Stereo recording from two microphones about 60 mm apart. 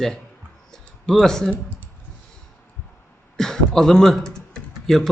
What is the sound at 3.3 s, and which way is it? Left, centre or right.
Typing, centre.